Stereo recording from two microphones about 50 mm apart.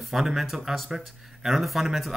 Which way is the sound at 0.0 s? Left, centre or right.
Centre.